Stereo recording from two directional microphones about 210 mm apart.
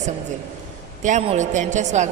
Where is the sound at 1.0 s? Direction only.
30° right (ahead or behind).